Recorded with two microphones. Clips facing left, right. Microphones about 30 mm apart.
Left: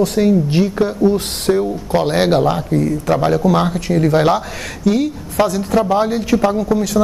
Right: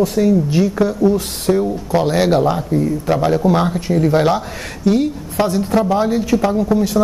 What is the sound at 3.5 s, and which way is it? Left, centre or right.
Speech, centre.